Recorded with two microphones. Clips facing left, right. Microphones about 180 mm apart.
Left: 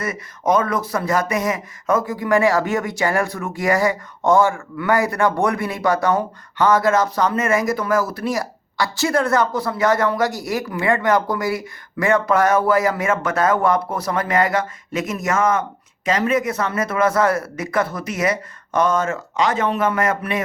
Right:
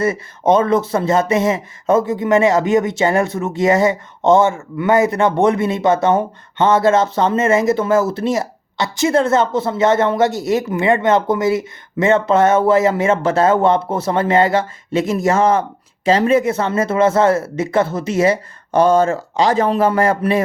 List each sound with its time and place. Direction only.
0.0 s speech: 25° right (ahead or behind)